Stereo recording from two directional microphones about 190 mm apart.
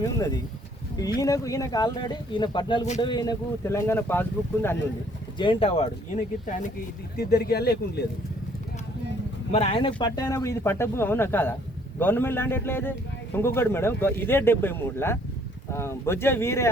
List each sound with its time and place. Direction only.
1.2 s speech: 15° left (ahead or behind)
5.4 s speech: 30° left (ahead or behind)
7.2 s speech: 55° left (ahead or behind)
9.5 s speech: 35° left (ahead or behind); by 16.6 s 15° left (ahead or behind)